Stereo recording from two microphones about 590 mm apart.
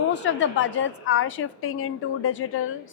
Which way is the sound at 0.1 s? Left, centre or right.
Centre.